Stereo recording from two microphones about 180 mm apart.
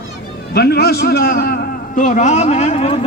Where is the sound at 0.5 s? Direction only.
65° left (ahead or behind).